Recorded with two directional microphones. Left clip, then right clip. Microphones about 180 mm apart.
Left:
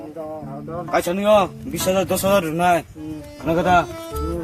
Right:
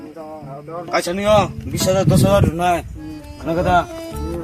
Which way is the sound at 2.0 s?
15° left (ahead or behind).